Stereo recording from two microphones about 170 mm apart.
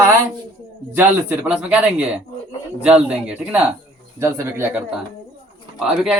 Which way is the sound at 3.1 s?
5° right (ahead or behind).